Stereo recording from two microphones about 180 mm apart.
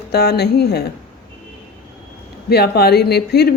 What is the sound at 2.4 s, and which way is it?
A woman's voice, 60° left (ahead or behind).